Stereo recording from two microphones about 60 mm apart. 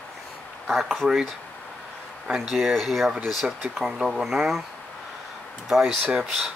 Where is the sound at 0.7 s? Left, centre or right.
Centre.